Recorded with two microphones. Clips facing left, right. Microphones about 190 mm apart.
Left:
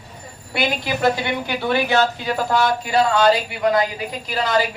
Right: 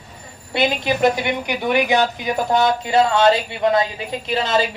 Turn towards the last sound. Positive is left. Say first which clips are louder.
# right 1 dB
turn(degrees=-25)  # may be behind; listen again after turning